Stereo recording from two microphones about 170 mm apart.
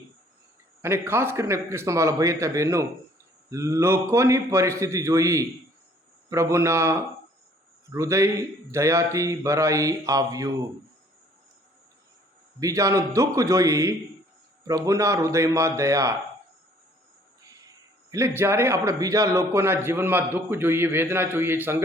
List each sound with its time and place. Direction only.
0.8 s a man's voice: 15° right (ahead or behind)
12.5 s a man's voice: 20° right (ahead or behind)
18.1 s a man's voice: 15° right (ahead or behind)